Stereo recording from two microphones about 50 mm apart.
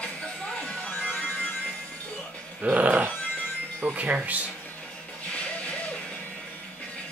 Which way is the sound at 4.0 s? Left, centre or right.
Right.